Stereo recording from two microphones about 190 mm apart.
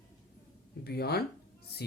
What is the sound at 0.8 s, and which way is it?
Speech, 55° left (ahead or behind).